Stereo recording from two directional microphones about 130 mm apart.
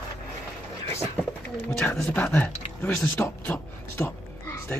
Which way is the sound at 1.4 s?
15° left (ahead or behind).